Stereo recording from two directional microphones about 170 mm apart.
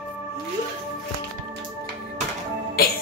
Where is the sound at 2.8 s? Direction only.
60° left (ahead or behind).